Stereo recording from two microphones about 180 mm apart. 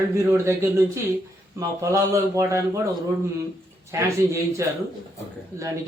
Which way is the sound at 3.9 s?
15° right (ahead or behind).